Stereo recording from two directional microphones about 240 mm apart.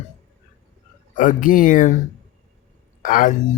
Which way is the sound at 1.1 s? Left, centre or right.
Left.